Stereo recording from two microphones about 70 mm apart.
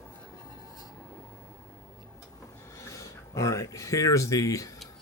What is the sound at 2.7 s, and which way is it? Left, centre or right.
Speech, left.